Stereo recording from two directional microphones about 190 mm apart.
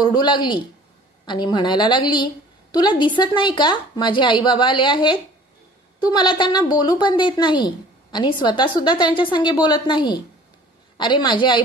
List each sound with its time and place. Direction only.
0.0 s a woman's voice: 20° left (ahead or behind)